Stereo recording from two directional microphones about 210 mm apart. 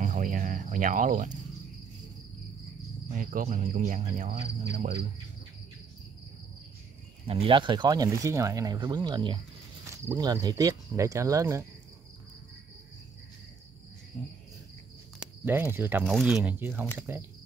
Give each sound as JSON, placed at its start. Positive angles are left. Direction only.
{"t": 0.0, "sound": "cricket", "side_deg": -35}
{"t": 3.1, "sound": "speech", "side_deg": -35}
{"t": 7.2, "sound": "speech", "side_deg": -25}
{"t": 15.1, "sound": "speech", "side_deg": -10}